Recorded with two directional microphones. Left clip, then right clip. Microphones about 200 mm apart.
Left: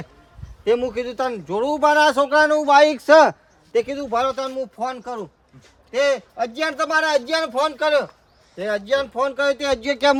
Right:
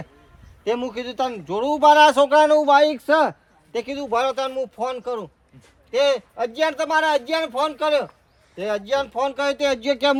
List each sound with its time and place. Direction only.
0.6 s speech: 15° right (ahead or behind)
2.7 s speech: centre (ahead or behind)
3.7 s speech: 15° right (ahead or behind)
9.8 s speech: 5° right (ahead or behind)